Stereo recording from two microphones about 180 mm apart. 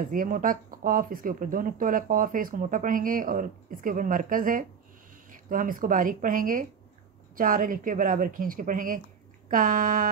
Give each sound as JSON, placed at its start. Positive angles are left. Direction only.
{"t": 0.1, "sound": "speech", "side_deg": -50}